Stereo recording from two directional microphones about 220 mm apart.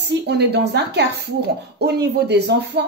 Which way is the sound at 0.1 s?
50° right (ahead or behind).